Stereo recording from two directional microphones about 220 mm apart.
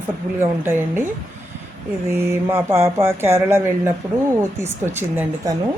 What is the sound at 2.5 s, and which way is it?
Speech, 10° right (ahead or behind).